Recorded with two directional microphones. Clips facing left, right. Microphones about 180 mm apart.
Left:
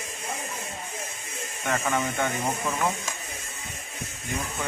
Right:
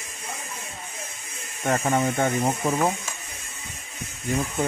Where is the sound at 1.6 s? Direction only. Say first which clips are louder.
Right 4 dB; 35° right (ahead or behind).